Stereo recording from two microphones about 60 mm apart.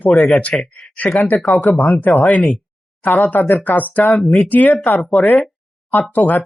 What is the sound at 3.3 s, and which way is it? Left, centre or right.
Speech, left.